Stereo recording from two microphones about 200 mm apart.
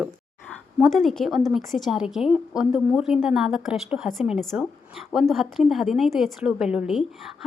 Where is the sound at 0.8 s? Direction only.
Centre (ahead or behind).